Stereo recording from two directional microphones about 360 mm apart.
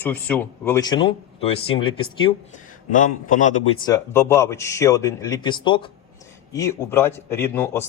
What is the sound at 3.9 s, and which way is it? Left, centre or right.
A man's voice, centre.